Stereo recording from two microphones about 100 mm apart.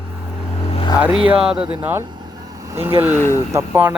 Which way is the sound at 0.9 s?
10° right (ahead or behind).